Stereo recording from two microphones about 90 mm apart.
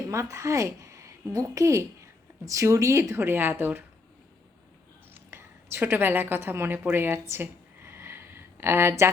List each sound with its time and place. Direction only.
0.1 s a woman's voice: 35° right (ahead or behind)
5.1 s a woman's voice: 25° right (ahead or behind)
6.9 s a sound: 25° right (ahead or behind)